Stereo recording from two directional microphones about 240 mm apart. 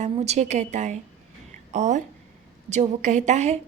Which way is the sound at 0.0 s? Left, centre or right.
Right.